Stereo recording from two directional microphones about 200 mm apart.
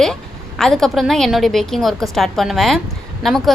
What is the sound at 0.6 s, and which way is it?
A woman's voice, centre (ahead or behind).